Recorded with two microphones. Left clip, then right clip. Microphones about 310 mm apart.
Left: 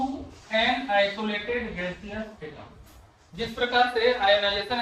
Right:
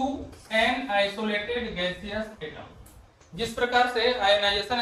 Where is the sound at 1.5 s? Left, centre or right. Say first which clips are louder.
Right 1 dB; left.